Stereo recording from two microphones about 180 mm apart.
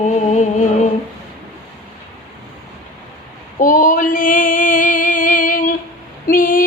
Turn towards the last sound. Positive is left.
turn(degrees=50)  # may be behind; listen again after turning